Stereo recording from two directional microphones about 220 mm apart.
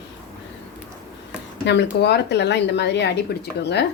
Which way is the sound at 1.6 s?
50° left (ahead or behind).